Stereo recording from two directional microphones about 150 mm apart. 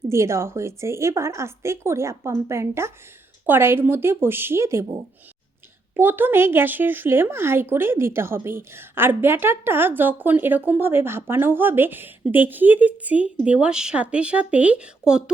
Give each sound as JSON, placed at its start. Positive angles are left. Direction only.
{"t": 0.1, "sound": "a woman's voice", "side_deg": -20}
{"t": 6.0, "sound": "a woman's voice", "side_deg": -15}